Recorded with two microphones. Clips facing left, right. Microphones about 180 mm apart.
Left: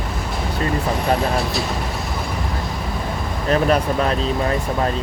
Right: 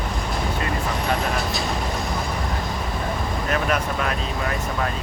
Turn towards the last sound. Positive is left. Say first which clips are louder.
# left 6 dB
turn(degrees=30)  # may be behind; listen again after turning